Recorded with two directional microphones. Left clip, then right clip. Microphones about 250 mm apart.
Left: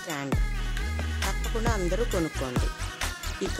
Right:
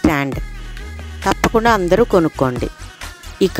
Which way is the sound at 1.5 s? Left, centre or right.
Right.